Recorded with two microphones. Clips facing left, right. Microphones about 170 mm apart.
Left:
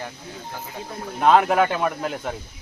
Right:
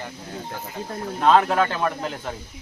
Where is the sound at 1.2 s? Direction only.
15° left (ahead or behind).